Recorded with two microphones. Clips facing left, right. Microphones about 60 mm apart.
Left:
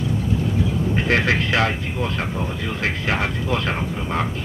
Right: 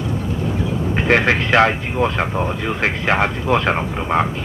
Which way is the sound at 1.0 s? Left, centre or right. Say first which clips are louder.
Right 5 dB; right.